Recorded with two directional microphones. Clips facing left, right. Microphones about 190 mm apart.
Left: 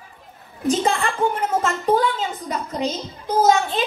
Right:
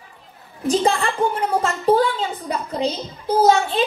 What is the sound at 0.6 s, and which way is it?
A woman's voice, 35° right (ahead or behind).